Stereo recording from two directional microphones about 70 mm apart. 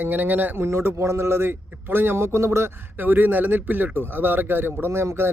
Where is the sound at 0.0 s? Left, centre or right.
Right.